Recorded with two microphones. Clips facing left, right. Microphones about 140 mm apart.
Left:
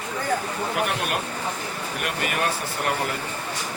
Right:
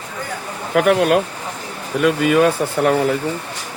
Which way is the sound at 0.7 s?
90° right.